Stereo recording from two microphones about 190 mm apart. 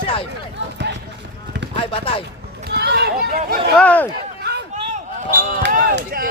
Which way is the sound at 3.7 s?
5° left (ahead or behind).